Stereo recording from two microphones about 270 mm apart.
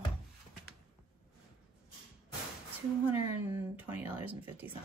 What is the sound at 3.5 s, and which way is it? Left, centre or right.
Speech, centre.